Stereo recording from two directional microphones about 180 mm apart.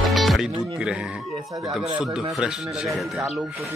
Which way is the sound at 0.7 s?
5° right (ahead or behind).